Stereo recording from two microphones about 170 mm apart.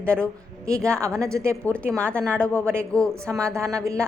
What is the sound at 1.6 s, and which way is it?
A woman's voice, 5° left (ahead or behind).